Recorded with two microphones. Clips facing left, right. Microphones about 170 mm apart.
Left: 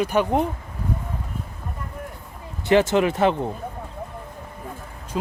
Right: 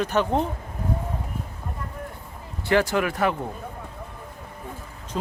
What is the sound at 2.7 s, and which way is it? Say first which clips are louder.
Speech: left 4 dB; 20° left (ahead or behind).